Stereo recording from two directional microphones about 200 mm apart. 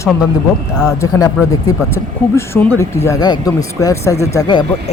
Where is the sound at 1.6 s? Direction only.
15° left (ahead or behind).